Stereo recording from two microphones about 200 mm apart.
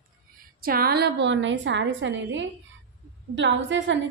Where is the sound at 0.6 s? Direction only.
50° right (ahead or behind).